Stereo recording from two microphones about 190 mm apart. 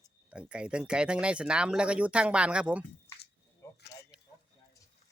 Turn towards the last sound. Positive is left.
turn(degrees=60)  # may be behind; listen again after turning